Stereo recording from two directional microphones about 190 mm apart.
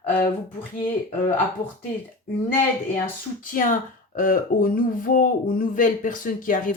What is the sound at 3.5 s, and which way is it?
Speech, 45° left (ahead or behind).